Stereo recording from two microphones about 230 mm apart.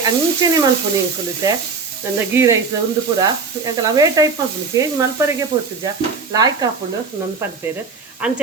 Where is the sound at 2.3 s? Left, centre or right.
Centre.